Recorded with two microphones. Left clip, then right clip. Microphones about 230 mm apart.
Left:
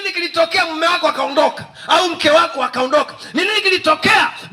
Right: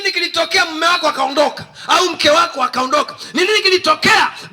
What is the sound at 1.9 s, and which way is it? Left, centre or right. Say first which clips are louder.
A man's voice: even; right.